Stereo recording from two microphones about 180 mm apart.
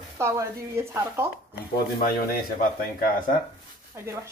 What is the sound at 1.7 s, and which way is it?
Speech, 55° left (ahead or behind).